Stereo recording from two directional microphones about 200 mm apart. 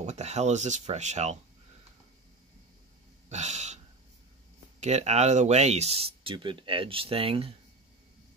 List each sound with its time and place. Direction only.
0.0 s speech: 35° right (ahead or behind)
3.3 s a sound: 35° right (ahead or behind)
4.7 s speech: 35° right (ahead or behind)